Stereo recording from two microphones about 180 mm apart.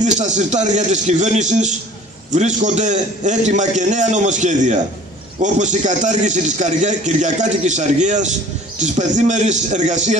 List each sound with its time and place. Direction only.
0.0 s a man's voice: 40° right (ahead or behind)